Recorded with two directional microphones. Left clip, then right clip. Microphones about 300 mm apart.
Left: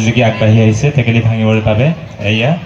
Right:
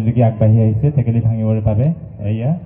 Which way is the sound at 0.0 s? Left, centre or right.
Right.